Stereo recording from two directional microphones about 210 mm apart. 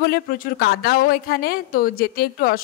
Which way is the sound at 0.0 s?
45° left (ahead or behind).